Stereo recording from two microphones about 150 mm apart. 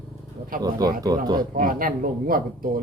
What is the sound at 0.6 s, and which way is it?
Speech, 25° right (ahead or behind).